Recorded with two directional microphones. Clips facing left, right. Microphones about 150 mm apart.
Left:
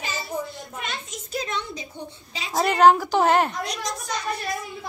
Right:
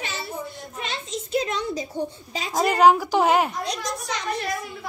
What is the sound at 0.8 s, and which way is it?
A child's voice, 30° right (ahead or behind).